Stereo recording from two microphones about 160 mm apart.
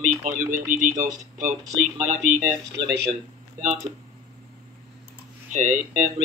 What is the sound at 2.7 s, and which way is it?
Speech, 90° right.